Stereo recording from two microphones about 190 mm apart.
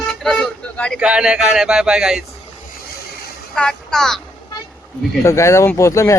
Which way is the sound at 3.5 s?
5° left (ahead or behind).